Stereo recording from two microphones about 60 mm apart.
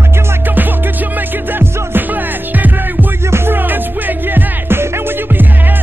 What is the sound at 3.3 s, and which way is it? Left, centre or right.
Music, right.